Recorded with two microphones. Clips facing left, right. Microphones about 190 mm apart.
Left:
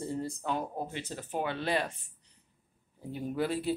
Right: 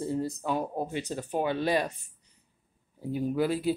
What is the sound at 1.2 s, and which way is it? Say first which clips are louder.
Speech: right 5 dB; 15° right (ahead or behind).